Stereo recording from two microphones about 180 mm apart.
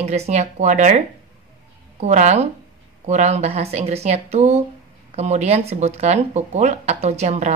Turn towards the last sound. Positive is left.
turn(degrees=-40)  # may be behind; listen again after turning